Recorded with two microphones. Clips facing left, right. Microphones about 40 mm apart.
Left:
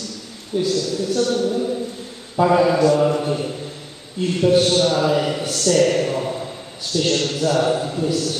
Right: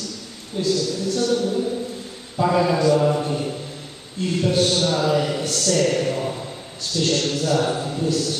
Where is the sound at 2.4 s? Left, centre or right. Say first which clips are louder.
Left 3 dB; centre.